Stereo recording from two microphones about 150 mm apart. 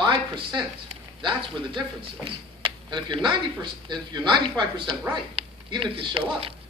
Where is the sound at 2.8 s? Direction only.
30° right (ahead or behind).